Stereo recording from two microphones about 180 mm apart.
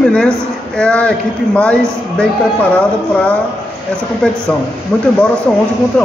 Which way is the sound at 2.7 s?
10° left (ahead or behind).